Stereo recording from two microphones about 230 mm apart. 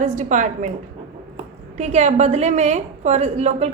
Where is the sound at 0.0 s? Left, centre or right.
Right.